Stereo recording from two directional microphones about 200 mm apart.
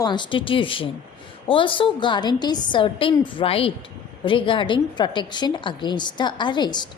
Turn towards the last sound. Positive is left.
turn(degrees=20)  # may be behind; listen again after turning